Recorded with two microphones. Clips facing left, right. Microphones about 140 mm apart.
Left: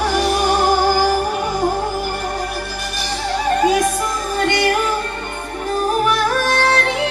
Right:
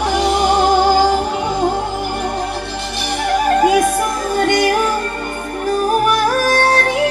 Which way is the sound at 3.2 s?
55° right (ahead or behind).